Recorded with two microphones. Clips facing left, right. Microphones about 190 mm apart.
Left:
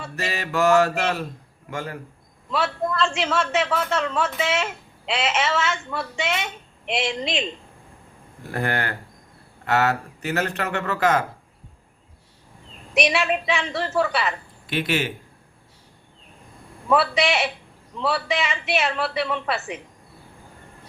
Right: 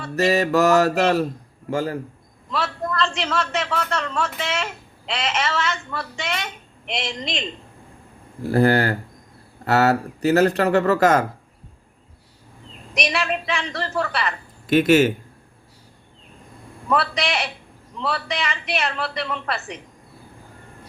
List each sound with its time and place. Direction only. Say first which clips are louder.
0.2 s speech: right 6 dB; 40° right (ahead or behind)
2.5 s a man's voice: left 2 dB; 5° left (ahead or behind)
8.4 s speech: right 9 dB; 35° right (ahead or behind)
12.9 s a man's voice: left 3 dB; 5° left (ahead or behind)
14.7 s a man's voice: right 10 dB; 45° right (ahead or behind)
16.9 s a man's voice: left 2 dB; 5° left (ahead or behind)